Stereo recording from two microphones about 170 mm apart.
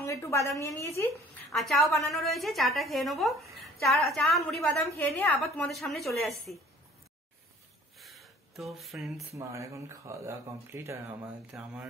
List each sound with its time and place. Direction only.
0.0 s a woman's voice: 15° left (ahead or behind)
1.5 s a woman's voice: centre (ahead or behind)
8.0 s a sound: centre (ahead or behind)
9.4 s speech: 15° right (ahead or behind)
11.5 s a woman's voice: 5° right (ahead or behind)